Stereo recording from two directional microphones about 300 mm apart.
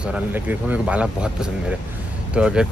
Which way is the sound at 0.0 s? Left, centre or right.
Centre.